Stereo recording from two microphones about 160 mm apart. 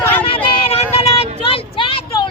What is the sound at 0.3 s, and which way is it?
Vehicle, 35° left (ahead or behind).